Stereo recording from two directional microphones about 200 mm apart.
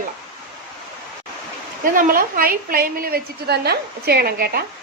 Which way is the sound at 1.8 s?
45° right (ahead or behind).